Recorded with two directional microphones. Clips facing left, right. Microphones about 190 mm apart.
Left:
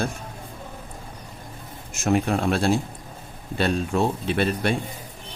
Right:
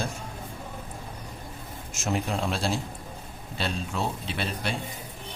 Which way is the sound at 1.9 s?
55° left (ahead or behind).